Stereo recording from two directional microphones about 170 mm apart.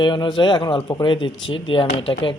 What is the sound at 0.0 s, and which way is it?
Speech, 25° left (ahead or behind).